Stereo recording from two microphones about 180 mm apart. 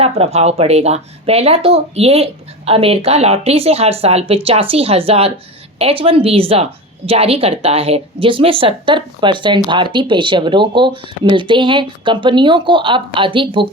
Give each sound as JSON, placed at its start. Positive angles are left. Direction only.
{"t": 0.0, "sound": "a woman's voice", "side_deg": -35}